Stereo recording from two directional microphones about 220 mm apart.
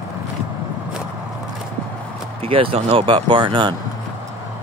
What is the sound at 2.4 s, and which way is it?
Speech, 25° right (ahead or behind).